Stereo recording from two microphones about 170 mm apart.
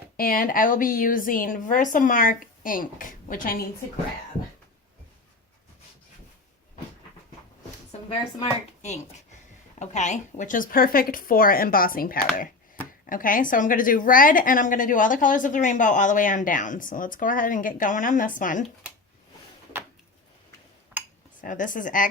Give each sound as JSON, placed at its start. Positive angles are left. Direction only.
{"t": 0.2, "sound": "a woman's voice", "side_deg": 60}
{"t": 8.8, "sound": "a woman's voice", "side_deg": 40}
{"t": 21.4, "sound": "a woman's voice", "side_deg": 50}